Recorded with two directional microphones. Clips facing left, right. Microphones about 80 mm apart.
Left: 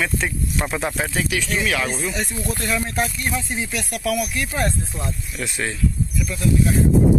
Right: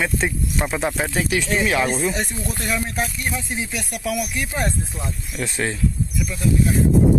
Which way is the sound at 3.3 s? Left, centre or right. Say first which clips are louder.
Left 1 dB; centre.